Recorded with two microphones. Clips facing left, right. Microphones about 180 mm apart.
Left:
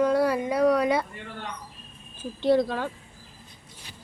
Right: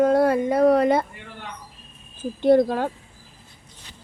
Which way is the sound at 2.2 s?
50° right (ahead or behind).